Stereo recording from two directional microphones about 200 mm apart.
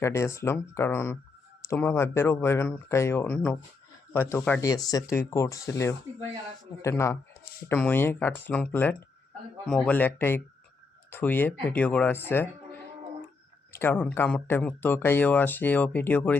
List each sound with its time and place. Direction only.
0.0 s speech: 15° left (ahead or behind)
4.7 s speech: 20° left (ahead or behind)